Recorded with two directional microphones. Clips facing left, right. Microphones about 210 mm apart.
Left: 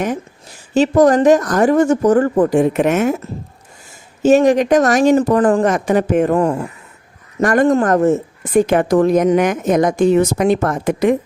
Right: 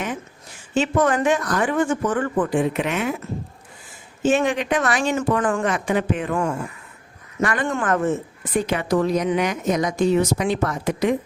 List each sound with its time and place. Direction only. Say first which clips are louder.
0.7 s speech: left 8 dB; 40° left (ahead or behind)
4.2 s a woman's voice: left 9 dB; 40° left (ahead or behind)